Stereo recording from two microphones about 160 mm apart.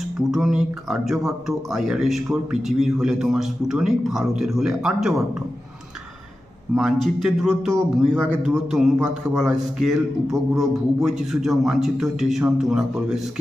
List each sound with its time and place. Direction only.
0.3 s speech: centre (ahead or behind)
6.7 s speech: centre (ahead or behind)